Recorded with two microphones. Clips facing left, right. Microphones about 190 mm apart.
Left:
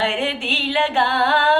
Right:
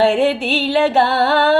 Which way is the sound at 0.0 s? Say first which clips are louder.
Right 8 dB; 45° right (ahead or behind).